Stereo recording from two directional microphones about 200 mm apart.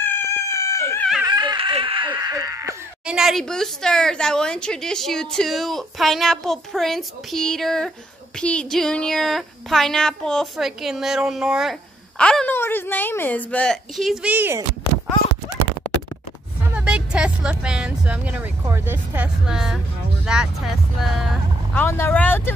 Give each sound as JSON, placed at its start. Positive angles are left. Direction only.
{"t": 0.0, "sound": "dog", "side_deg": 15}
{"t": 1.2, "sound": "a sound", "side_deg": -20}
{"t": 3.1, "sound": "a woman's voice", "side_deg": 0}
{"t": 16.7, "sound": "a woman's voice", "side_deg": -5}
{"t": 21.8, "sound": "speech", "side_deg": 10}